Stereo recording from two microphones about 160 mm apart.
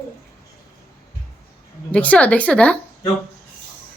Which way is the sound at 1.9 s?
10° left (ahead or behind).